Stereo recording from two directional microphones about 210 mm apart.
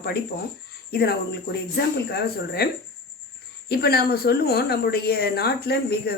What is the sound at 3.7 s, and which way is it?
A woman's voice, 50° left (ahead or behind).